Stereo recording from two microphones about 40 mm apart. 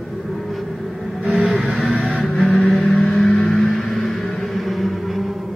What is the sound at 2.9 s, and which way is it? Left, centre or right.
Vehicle, left.